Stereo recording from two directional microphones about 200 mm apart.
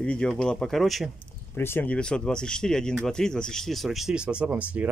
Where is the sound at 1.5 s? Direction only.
10° left (ahead or behind); by 4.9 s 5° right (ahead or behind).